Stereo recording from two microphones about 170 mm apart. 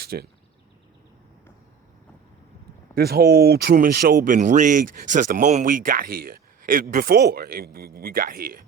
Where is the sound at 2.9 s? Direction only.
65° right (ahead or behind).